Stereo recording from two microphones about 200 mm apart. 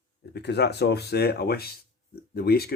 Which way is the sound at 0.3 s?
55° left (ahead or behind).